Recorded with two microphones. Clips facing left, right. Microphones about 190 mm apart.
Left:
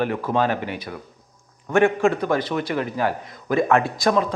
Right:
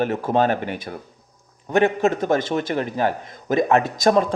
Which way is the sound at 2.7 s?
35° right (ahead or behind).